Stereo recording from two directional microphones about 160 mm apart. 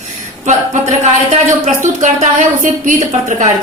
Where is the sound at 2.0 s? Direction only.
50° right (ahead or behind).